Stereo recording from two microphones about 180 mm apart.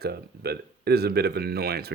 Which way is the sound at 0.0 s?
60° right (ahead or behind).